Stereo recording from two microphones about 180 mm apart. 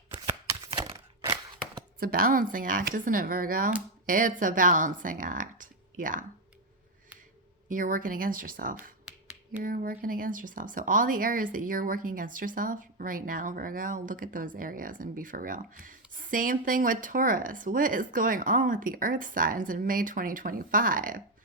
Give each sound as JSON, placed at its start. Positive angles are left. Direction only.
{"t": 0.3, "sound": "shuffling cards", "side_deg": -30}
{"t": 0.9, "sound": "a sound", "side_deg": -20}
{"t": 2.0, "sound": "speech", "side_deg": -50}
{"t": 7.7, "sound": "speech", "side_deg": -50}